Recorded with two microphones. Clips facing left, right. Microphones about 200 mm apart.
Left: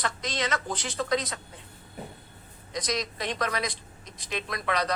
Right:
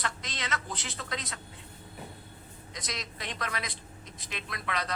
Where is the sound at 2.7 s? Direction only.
40° left (ahead or behind).